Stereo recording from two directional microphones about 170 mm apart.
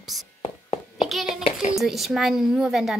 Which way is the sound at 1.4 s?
45° left (ahead or behind).